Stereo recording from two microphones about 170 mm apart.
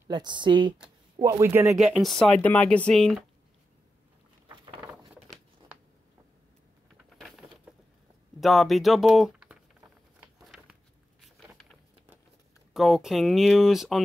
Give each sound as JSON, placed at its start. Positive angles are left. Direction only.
{"t": 0.1, "sound": "speech", "side_deg": -25}
{"t": 1.2, "sound": "speech", "side_deg": -15}
{"t": 2.0, "sound": "speech", "side_deg": 0}
{"t": 7.2, "sound": "a sound", "side_deg": 0}
{"t": 8.4, "sound": "speech", "side_deg": 0}
{"t": 10.2, "sound": "a sound", "side_deg": -5}
{"t": 12.7, "sound": "speech", "side_deg": 0}